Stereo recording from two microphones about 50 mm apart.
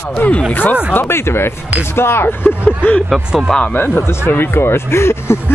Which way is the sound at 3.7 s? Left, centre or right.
Left.